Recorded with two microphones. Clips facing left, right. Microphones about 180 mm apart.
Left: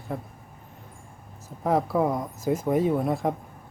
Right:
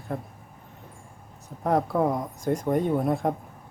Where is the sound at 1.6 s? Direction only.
Centre (ahead or behind).